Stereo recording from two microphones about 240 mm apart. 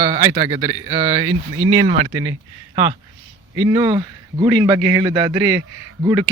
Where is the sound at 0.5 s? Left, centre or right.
Centre.